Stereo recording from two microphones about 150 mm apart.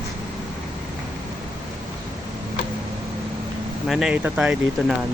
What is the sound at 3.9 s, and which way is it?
Speech, 5° right (ahead or behind).